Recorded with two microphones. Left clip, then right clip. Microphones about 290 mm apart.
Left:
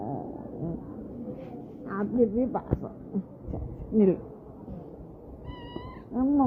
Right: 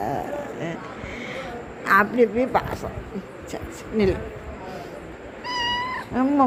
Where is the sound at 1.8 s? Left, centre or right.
Centre.